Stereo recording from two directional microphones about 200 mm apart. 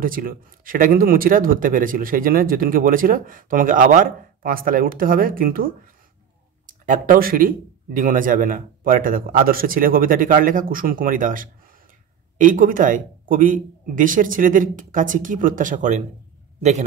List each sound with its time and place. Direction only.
0.0 s speech: 45° right (ahead or behind)